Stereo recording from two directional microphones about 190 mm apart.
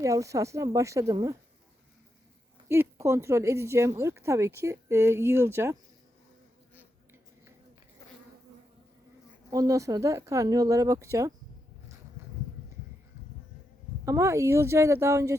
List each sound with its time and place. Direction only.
0.0 s speech: 15° right (ahead or behind)
2.6 s speech: 15° right (ahead or behind)
9.5 s speech: 15° right (ahead or behind)
14.0 s speech: 15° right (ahead or behind)